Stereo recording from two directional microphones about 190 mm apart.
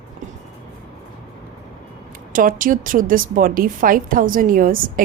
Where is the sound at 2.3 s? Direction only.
45° right (ahead or behind).